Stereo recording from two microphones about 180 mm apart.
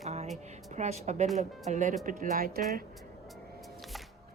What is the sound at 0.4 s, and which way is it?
Speech, 40° right (ahead or behind).